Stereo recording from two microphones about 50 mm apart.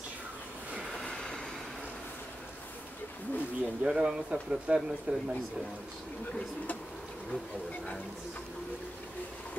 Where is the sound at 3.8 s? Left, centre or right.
Centre.